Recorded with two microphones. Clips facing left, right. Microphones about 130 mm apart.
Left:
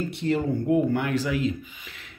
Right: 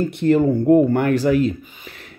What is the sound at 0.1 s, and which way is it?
Speech, 50° right (ahead or behind).